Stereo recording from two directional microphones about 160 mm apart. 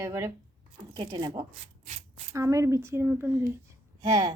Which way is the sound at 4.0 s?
30° right (ahead or behind).